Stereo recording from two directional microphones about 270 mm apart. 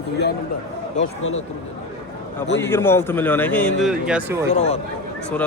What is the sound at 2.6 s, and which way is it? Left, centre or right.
A man's voice, centre.